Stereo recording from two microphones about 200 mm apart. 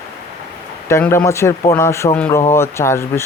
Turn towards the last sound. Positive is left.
turn(degrees=15)  # may be behind; listen again after turning